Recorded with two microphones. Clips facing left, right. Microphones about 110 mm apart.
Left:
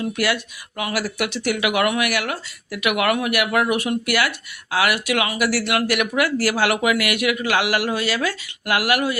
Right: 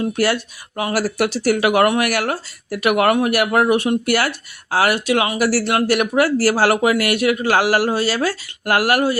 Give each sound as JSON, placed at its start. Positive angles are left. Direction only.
{"t": 0.0, "sound": "speech", "side_deg": -35}